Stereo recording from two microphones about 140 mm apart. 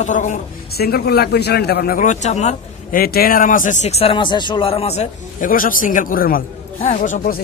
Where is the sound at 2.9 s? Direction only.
90° left; by 3.7 s 70° left (ahead or behind).